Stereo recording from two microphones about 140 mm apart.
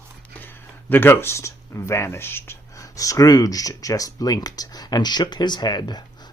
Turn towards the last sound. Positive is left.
turn(degrees=30)  # may be behind; listen again after turning